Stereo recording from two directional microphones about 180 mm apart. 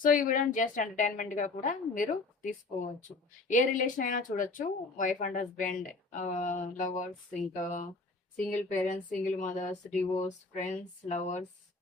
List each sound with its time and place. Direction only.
0.0 s a woman's voice: 50° left (ahead or behind)